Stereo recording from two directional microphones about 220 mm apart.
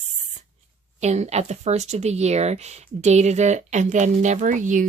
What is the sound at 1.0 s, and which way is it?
A woman's voice, 30° right (ahead or behind).